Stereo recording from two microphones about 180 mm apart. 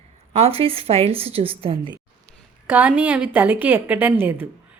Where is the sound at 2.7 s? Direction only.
5° right (ahead or behind).